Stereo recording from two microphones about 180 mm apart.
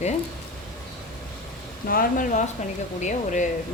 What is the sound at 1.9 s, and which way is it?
Speech, 50° left (ahead or behind).